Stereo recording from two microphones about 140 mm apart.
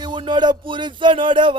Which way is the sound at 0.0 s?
35° right (ahead or behind).